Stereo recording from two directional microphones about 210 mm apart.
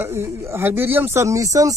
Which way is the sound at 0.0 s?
10° right (ahead or behind).